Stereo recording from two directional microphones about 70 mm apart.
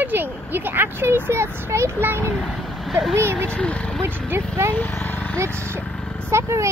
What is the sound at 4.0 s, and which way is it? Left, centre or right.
Speech, right.